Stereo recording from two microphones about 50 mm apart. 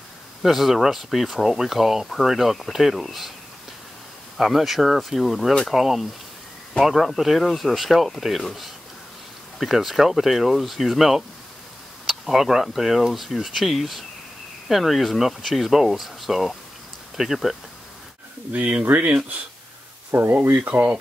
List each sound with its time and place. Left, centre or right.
0.4 s speech: centre
4.4 s speech: centre
18.5 s speech: right
20.1 s speech: right